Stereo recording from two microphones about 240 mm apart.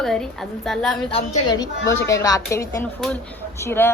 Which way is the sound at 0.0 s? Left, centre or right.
Centre.